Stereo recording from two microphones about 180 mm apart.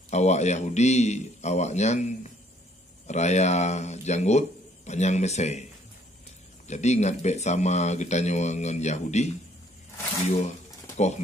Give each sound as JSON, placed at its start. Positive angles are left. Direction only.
{"t": 0.1, "sound": "speech", "side_deg": 40}
{"t": 6.7, "sound": "speech", "side_deg": 40}